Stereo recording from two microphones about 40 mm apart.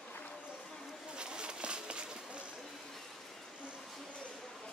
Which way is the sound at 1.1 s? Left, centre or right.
Right.